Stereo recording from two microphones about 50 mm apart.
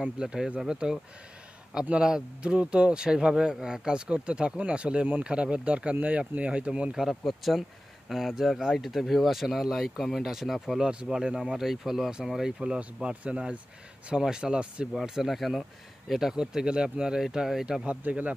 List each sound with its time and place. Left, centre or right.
0.0 s a man's voice: centre
7.0 s speech: centre
10.8 s speech: centre
12.5 s a man's voice: right
15.0 s speech: centre
17.8 s a man's voice: right